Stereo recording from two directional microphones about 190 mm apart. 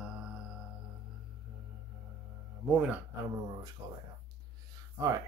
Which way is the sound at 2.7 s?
5° right (ahead or behind).